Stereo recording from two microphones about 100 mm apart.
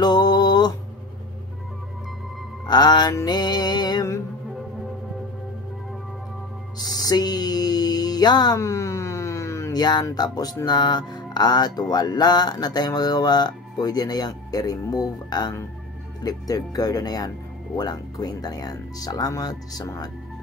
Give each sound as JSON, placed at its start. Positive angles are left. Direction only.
{"t": 0.0, "sound": "a sound", "side_deg": 45}
{"t": 2.6, "sound": "music", "side_deg": 45}
{"t": 3.3, "sound": "speech", "side_deg": 45}
{"t": 6.8, "sound": "music", "side_deg": 40}
{"t": 8.5, "sound": "a sound", "side_deg": 30}
{"t": 9.8, "sound": "speech", "side_deg": 45}